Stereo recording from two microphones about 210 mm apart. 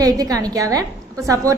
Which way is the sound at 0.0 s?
15° right (ahead or behind).